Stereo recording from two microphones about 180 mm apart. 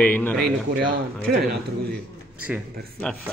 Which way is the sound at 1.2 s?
60° right (ahead or behind).